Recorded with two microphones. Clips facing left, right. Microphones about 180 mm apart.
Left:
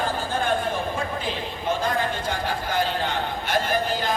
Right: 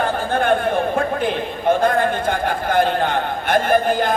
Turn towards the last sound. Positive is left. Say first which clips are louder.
# right 8 dB
turn(degrees=-55)  # may be behind; listen again after turning